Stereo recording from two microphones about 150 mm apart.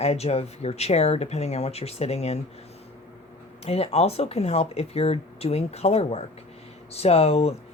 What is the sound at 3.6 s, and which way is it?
Speech, 40° left (ahead or behind).